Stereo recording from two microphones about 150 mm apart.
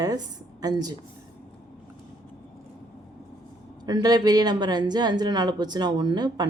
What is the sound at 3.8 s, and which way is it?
Speech, 25° right (ahead or behind).